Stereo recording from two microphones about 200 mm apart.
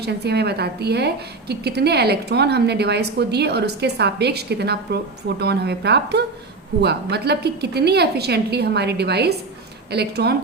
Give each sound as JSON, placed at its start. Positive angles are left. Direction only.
{"t": 0.0, "sound": "a woman's voice", "side_deg": -55}